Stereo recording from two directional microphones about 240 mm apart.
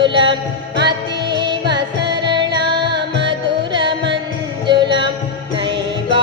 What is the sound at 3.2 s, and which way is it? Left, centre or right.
Music, centre.